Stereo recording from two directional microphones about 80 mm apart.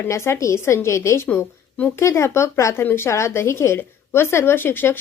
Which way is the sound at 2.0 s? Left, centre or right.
Left.